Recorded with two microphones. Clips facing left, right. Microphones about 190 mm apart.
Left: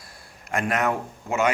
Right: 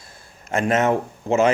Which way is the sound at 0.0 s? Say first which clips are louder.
Right 1 dB; 25° right (ahead or behind).